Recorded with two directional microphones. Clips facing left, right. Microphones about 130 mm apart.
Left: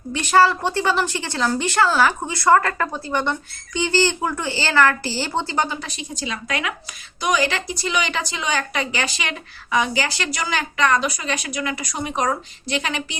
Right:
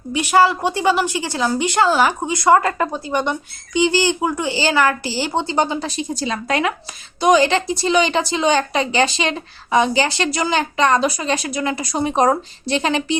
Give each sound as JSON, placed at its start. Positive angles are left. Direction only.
{"t": 0.1, "sound": "a woman's voice", "side_deg": -15}